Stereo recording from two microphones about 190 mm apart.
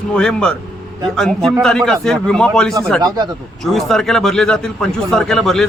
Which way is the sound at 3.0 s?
20° right (ahead or behind).